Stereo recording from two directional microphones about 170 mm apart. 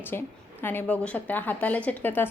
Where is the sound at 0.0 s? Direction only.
10° left (ahead or behind).